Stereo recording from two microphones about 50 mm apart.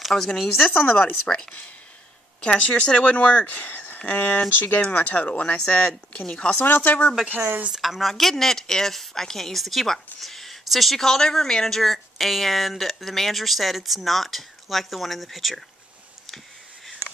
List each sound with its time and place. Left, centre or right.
0.1 s speech: centre
0.7 s speech: left
2.6 s speech: left
3.5 s a sound: left
4.0 s speech: left
6.6 s speech: left
7.2 s speech: right
7.7 s a woman's voice: centre